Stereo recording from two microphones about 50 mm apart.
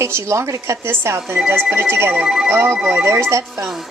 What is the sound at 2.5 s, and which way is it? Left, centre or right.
Speech, right.